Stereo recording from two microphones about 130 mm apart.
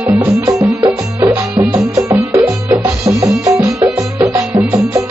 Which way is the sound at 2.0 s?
25° right (ahead or behind).